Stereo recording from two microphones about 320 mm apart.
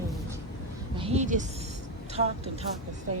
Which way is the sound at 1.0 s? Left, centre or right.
Centre.